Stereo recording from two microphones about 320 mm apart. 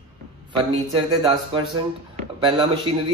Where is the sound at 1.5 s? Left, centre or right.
Centre.